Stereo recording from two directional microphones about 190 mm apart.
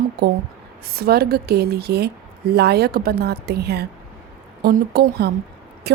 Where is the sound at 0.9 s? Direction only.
55° right (ahead or behind).